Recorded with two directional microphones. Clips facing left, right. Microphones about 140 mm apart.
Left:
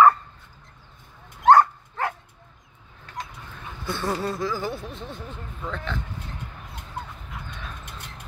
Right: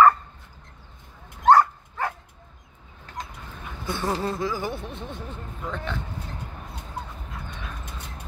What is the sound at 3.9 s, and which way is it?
Speech, 20° right (ahead or behind).